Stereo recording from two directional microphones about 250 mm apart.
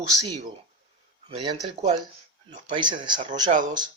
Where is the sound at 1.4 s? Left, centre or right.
Centre.